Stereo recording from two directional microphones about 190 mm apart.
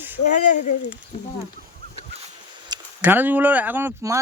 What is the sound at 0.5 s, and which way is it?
Speech, 40° left (ahead or behind).